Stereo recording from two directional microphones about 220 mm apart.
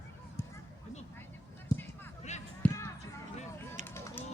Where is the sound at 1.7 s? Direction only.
15° left (ahead or behind).